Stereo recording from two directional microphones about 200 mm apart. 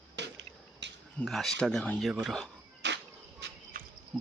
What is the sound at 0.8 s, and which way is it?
Cricket, 60° right (ahead or behind).